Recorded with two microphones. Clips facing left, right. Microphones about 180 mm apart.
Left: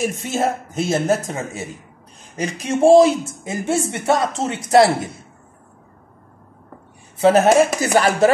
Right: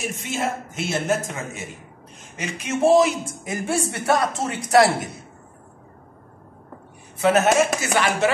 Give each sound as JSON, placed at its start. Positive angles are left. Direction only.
{"t": 0.0, "sound": "a man's voice", "side_deg": 40}
{"t": 7.2, "sound": "a man's voice", "side_deg": 35}